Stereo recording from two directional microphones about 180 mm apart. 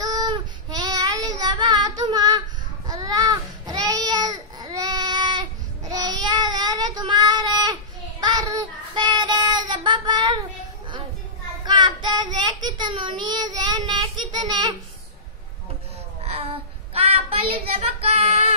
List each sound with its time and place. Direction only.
0.0 s child singing: 20° right (ahead or behind)
2.9 s a sound: 20° right (ahead or behind)
8.2 s child singing: 20° right (ahead or behind)
11.6 s child singing: 25° right (ahead or behind)
16.2 s child singing: 35° right (ahead or behind)